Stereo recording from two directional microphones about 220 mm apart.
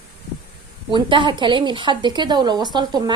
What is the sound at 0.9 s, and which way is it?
Speech, 20° right (ahead or behind).